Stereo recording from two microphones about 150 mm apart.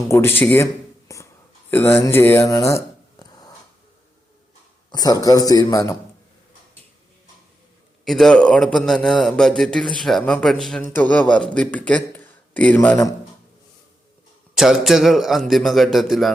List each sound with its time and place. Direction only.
0.1 s speech: 15° left (ahead or behind)
4.9 s a man's voice: 25° left (ahead or behind)
8.0 s a man's voice: centre (ahead or behind)
14.5 s a man's voice: 5° right (ahead or behind)